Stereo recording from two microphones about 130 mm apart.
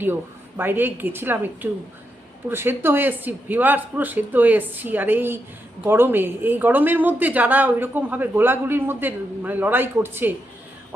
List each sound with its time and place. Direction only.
0.0 s a woman's voice: 15° right (ahead or behind)